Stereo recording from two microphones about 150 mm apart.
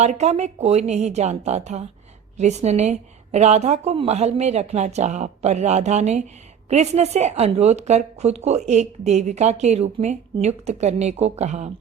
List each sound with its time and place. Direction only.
0.0 s a woman's voice: 50° right (ahead or behind)